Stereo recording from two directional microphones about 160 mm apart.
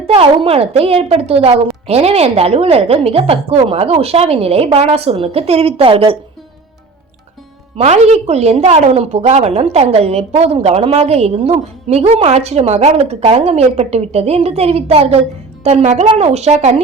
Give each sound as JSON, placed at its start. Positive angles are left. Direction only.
{"t": 0.1, "sound": "a woman's voice", "side_deg": -35}
{"t": 7.8, "sound": "a woman's voice", "side_deg": -40}